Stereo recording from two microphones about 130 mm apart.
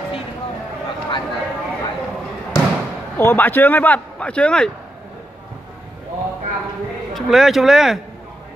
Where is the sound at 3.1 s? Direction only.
15° left (ahead or behind).